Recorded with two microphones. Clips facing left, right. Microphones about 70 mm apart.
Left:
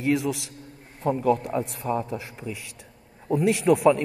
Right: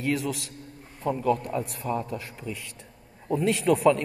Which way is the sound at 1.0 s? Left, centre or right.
Left.